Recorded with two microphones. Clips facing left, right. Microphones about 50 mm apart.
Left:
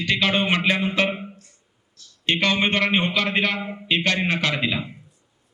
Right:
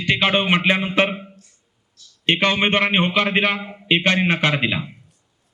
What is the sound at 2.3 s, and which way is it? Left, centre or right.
A man's voice, right.